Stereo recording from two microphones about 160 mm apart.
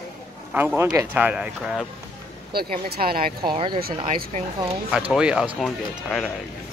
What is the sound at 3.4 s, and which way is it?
Speech, 30° right (ahead or behind).